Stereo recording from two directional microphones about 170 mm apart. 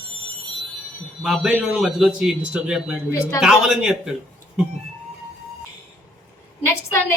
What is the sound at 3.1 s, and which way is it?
Speech, 15° left (ahead or behind).